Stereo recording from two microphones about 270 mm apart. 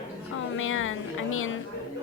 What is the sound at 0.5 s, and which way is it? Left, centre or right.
A woman's voice, left.